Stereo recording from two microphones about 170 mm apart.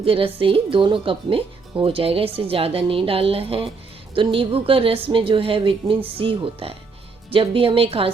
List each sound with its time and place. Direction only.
0.0 s a woman's voice: 30° right (ahead or behind)